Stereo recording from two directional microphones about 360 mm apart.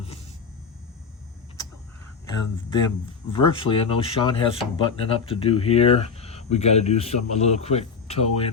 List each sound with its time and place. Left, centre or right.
3.2 s speech: centre